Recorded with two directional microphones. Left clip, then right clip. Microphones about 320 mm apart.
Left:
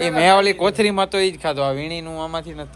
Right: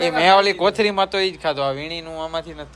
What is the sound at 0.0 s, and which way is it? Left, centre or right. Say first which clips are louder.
Speech: even; centre.